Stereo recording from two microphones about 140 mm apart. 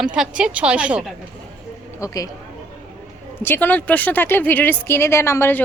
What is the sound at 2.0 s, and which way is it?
Speech, 25° left (ahead or behind).